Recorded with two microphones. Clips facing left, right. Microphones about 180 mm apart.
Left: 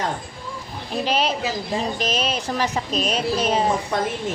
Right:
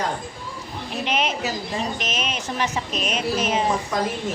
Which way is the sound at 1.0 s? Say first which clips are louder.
Left 2 dB; 35° left (ahead or behind).